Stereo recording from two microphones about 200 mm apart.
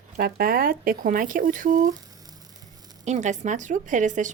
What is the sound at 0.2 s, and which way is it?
A woman's voice, 50° right (ahead or behind).